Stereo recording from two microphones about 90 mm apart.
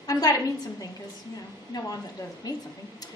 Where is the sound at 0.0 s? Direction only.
40° left (ahead or behind).